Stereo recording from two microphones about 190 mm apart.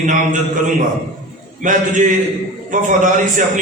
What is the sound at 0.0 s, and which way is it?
Speech, 45° right (ahead or behind).